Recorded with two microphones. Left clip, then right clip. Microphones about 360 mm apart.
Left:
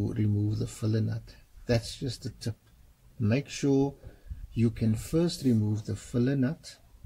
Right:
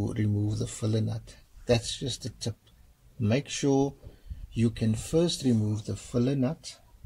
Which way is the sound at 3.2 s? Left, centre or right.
Right.